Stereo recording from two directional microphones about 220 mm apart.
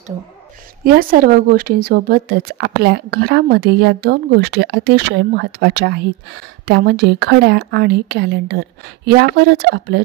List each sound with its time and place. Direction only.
0.8 s a woman's voice: 40° right (ahead or behind)